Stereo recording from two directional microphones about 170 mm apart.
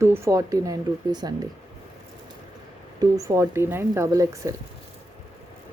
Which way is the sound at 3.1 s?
20° right (ahead or behind).